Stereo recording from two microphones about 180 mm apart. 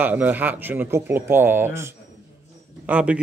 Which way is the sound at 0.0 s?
10° right (ahead or behind).